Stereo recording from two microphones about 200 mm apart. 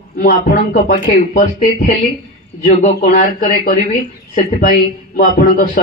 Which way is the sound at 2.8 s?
45° left (ahead or behind).